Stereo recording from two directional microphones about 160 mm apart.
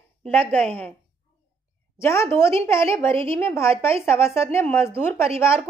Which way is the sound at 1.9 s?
15° left (ahead or behind).